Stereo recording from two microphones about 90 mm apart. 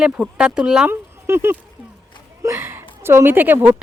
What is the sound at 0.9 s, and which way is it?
Speech, 25° right (ahead or behind).